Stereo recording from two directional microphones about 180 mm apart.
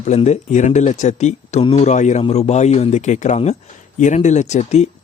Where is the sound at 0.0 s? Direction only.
40° left (ahead or behind).